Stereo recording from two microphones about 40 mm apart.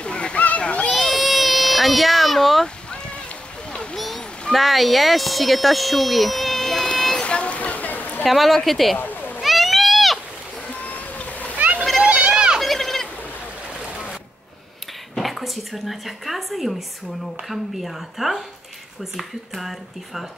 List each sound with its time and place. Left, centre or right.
0.0 s a sound: left
0.9 s baby cry: centre
1.6 s a sound: centre
3.9 s speech: centre
7.2 s a sound: left
8.2 s speech: centre
8.9 s cat: left
9.4 s goat: centre
10.7 s boat: left
11.5 s splash: right
12.0 s a sound: right
12.5 s goat: centre
15.1 s speech: centre